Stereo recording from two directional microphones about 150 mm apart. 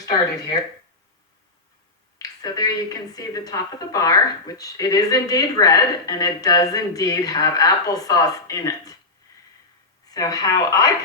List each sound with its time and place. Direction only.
0.0 s a woman's voice: 25° left (ahead or behind)
2.1 s a woman's voice: 25° left (ahead or behind)
10.1 s a woman's voice: 25° left (ahead or behind)